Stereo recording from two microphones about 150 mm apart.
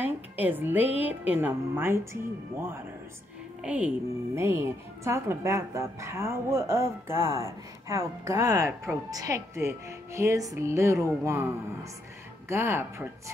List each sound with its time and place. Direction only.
0.0 s a woman's voice: 10° right (ahead or behind)